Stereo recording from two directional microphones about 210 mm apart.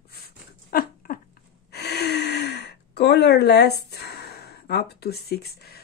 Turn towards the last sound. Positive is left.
turn(degrees=50)  # may be behind; listen again after turning